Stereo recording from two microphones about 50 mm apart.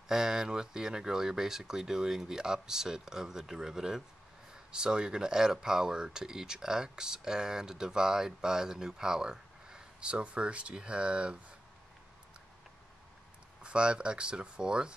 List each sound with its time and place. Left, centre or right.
0.1 s speech: centre
13.6 s speech: centre